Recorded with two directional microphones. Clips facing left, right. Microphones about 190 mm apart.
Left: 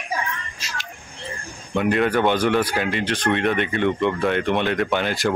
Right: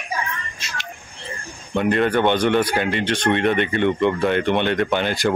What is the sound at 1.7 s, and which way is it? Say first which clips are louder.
Speech: right 1 dB; centre (ahead or behind).